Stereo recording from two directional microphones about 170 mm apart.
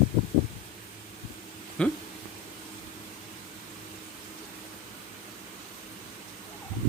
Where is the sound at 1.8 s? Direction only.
5° left (ahead or behind).